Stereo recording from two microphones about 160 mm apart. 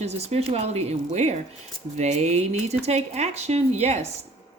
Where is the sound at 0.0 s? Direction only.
40° right (ahead or behind).